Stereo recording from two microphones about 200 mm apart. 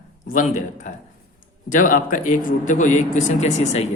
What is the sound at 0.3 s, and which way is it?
A man's voice, 40° left (ahead or behind).